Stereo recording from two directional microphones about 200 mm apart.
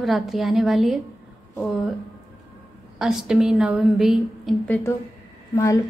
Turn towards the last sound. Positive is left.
turn(degrees=15)  # may be behind; listen again after turning